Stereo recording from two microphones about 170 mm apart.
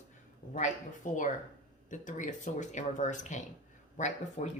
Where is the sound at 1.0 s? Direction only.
45° left (ahead or behind).